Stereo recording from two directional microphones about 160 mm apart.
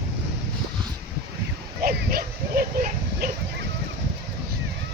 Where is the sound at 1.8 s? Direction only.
65° right (ahead or behind).